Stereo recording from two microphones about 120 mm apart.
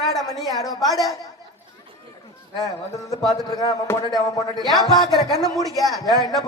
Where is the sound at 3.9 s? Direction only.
20° left (ahead or behind).